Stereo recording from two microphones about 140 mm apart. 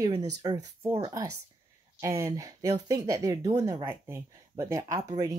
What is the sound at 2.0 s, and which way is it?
Speech, 25° right (ahead or behind).